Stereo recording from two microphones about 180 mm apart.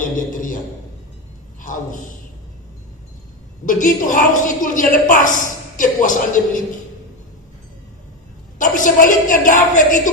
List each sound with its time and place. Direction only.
1.6 s a man's voice: 45° left (ahead or behind)
3.6 s a woman's voice: 45° left (ahead or behind)
8.5 s a woman's voice: 45° left (ahead or behind)